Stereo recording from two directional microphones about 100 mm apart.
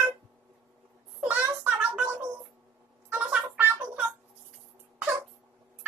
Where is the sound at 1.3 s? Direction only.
15° right (ahead or behind).